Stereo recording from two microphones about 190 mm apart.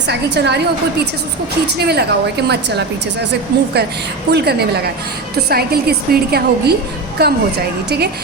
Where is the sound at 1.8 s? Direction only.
60° right (ahead or behind).